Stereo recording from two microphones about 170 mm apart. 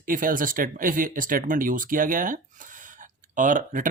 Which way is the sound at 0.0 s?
55° right (ahead or behind).